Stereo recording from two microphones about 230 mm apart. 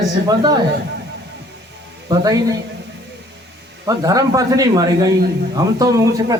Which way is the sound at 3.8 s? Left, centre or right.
Centre.